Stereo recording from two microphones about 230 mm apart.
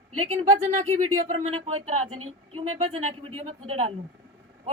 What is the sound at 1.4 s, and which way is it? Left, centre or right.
Speech, right.